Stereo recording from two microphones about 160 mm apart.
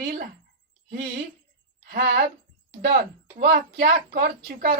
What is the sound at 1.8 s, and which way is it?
Speech, 80° right.